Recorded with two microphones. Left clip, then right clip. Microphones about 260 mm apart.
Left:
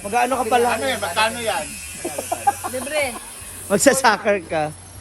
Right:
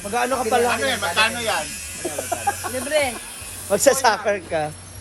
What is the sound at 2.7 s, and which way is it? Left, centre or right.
Speech, left.